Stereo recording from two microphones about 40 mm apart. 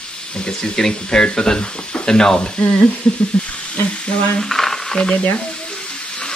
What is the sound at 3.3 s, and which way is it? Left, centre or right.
Stir, left.